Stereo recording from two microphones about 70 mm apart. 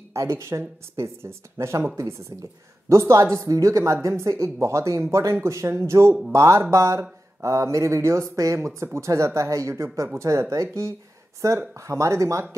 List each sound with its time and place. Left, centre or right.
0.1 s speech: right